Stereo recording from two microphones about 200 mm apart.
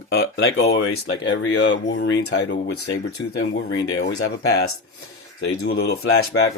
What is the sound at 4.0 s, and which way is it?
Speech, 60° left (ahead or behind).